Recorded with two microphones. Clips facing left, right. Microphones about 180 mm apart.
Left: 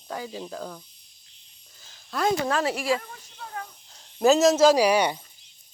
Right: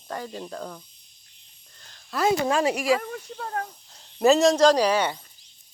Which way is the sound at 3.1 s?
60° right (ahead or behind).